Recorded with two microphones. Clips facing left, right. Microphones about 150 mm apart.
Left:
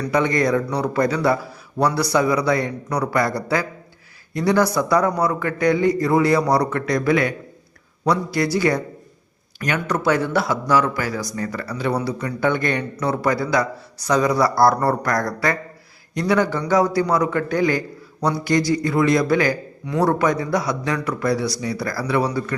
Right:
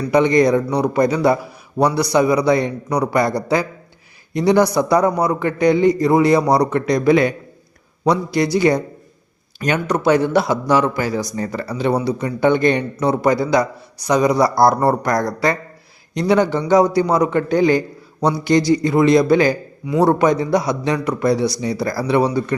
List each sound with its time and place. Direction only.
0.1 s a man's voice: 20° right (ahead or behind)